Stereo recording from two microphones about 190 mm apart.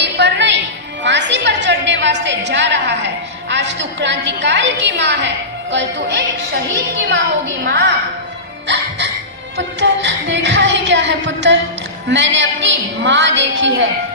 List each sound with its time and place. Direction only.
0.0 s music: 65° right (ahead or behind)
5.7 s speech: 70° right (ahead or behind)
7.6 s speech: 60° right (ahead or behind)
8.6 s music: 65° right (ahead or behind)